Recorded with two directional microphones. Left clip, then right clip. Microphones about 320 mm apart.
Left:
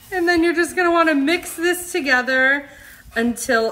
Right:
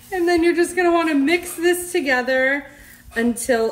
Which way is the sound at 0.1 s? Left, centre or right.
Centre.